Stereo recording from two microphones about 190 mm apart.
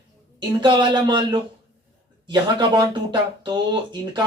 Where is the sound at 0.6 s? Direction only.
25° right (ahead or behind).